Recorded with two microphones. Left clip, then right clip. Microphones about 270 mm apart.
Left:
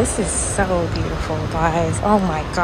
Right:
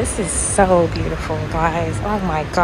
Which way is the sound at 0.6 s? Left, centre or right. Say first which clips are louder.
Right 7 dB; centre.